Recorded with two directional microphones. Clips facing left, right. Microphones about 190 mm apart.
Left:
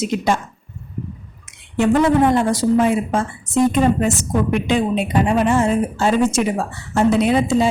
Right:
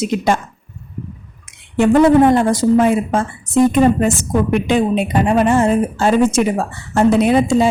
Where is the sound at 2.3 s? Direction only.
50° right (ahead or behind).